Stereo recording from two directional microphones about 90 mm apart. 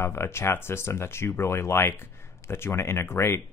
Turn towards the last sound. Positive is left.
turn(degrees=30)  # may be behind; listen again after turning